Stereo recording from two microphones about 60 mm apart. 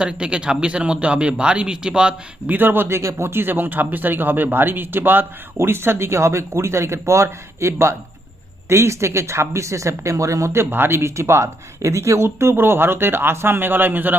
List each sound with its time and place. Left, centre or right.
0.0 s speech: centre
2.5 s speech: right
3.0 s a man's voice: right
10.5 s speech: right